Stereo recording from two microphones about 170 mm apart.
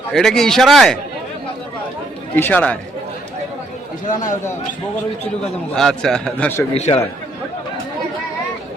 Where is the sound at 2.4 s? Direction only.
10° left (ahead or behind).